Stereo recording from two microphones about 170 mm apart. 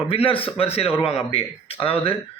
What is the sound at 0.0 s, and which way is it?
A man's voice, 35° left (ahead or behind).